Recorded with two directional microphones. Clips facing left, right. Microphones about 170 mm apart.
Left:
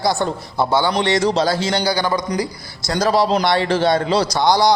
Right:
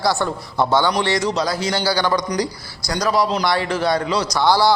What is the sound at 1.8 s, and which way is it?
Speech, 15° left (ahead or behind).